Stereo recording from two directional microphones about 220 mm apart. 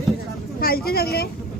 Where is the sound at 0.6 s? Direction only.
45° left (ahead or behind).